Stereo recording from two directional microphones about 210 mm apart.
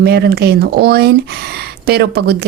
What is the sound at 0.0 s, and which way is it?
Speech, 50° right (ahead or behind).